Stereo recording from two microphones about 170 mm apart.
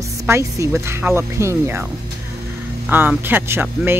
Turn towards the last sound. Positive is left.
turn(degrees=-15)  # may be behind; listen again after turning